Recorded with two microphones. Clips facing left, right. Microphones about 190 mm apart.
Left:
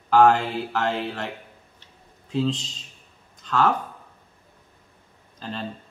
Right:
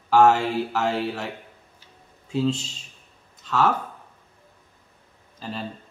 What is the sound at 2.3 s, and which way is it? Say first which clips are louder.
Speech: right 1 dB; 5° right (ahead or behind).